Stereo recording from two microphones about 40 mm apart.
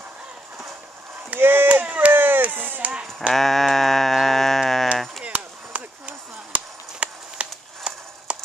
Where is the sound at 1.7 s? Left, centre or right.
Right.